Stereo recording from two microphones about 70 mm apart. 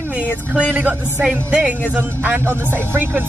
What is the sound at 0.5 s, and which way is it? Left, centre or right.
Speech, right.